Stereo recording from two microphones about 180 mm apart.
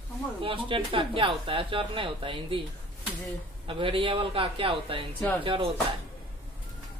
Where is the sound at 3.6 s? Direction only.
30° right (ahead or behind).